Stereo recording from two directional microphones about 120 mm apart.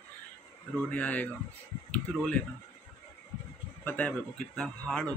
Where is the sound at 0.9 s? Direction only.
10° left (ahead or behind).